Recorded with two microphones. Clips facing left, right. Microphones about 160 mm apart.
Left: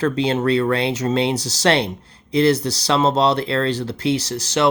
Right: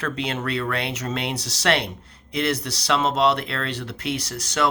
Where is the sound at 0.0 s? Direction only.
30° left (ahead or behind).